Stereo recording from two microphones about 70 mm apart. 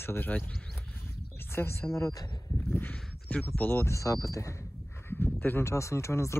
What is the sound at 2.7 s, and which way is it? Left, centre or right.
Speech, left.